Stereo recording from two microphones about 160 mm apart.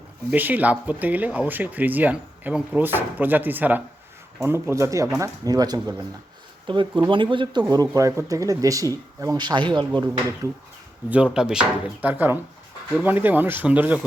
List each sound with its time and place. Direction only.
0.3 s speech: 10° right (ahead or behind)
11.1 s speech: 5° right (ahead or behind)